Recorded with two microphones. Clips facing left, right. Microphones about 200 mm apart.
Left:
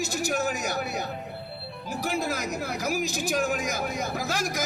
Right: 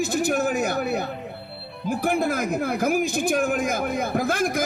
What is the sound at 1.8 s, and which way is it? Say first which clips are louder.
Speech: right 6 dB; 55° right (ahead or behind).